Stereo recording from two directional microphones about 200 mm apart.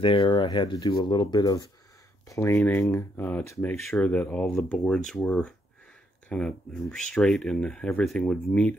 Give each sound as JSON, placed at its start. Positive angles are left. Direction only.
{"t": 0.0, "sound": "speech", "side_deg": 25}